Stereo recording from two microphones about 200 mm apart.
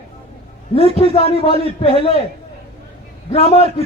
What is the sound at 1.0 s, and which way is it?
A man's voice, 30° left (ahead or behind).